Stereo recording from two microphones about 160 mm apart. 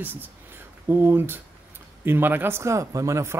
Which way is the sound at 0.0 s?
10° right (ahead or behind).